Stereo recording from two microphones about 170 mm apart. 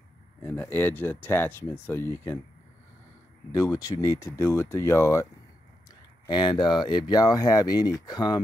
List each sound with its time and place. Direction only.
0.4 s speech: 15° left (ahead or behind)
3.5 s speech: 20° left (ahead or behind)